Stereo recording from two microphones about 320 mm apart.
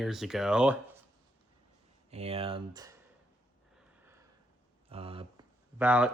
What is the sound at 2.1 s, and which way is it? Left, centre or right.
Speech, centre.